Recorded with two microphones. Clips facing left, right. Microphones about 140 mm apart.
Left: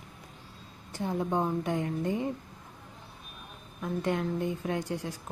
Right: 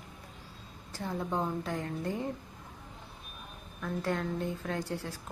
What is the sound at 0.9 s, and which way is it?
A woman's voice, 20° left (ahead or behind).